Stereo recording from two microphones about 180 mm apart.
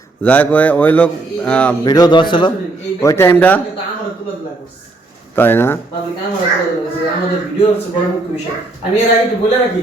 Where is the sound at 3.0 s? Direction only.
15° left (ahead or behind).